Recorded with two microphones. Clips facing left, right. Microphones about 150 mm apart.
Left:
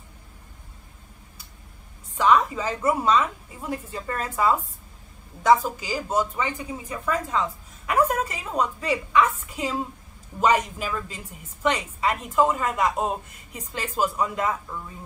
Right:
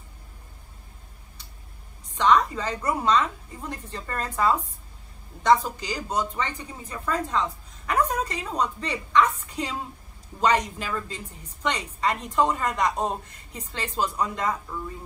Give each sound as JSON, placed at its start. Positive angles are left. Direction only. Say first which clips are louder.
{"t": 2.1, "sound": "a woman's voice", "louder": "left 1 dB", "side_deg": 5}